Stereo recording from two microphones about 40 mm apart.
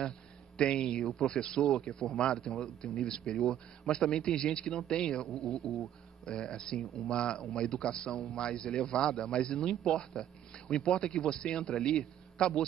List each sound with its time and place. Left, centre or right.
0.6 s a man's voice: centre
5.4 s speech: centre
6.2 s a man's voice: centre